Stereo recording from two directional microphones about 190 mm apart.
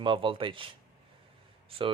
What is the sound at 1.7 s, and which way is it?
Speech, 30° right (ahead or behind).